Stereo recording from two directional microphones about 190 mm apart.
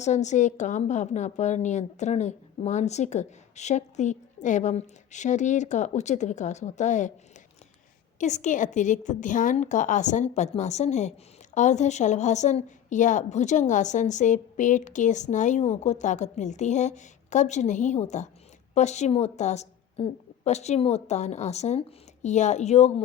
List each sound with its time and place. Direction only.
0.0 s a woman's voice: 40° left (ahead or behind)
8.2 s a woman's voice: 40° left (ahead or behind)